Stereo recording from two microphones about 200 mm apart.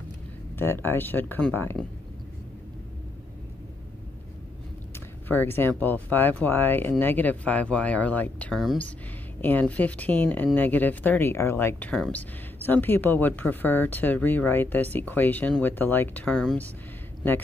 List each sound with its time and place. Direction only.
0.6 s speech: 10° left (ahead or behind)
5.3 s speech: 10° left (ahead or behind)